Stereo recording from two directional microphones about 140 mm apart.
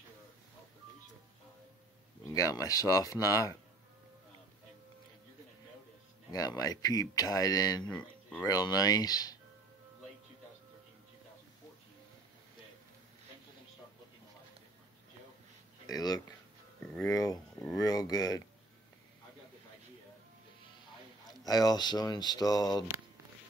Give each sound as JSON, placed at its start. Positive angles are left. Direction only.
{"t": 2.2, "sound": "speech", "side_deg": 25}
{"t": 6.3, "sound": "speech", "side_deg": 25}
{"t": 7.9, "sound": "speech", "side_deg": 10}
{"t": 8.5, "sound": "speech", "side_deg": 25}
{"t": 15.9, "sound": "speech", "side_deg": 30}
{"t": 16.8, "sound": "a sound", "side_deg": 5}
{"t": 17.1, "sound": "speech", "side_deg": 25}
{"t": 21.3, "sound": "speech", "side_deg": 30}